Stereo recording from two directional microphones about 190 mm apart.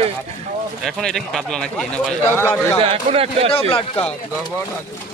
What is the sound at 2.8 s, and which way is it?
Speech, 30° right (ahead or behind).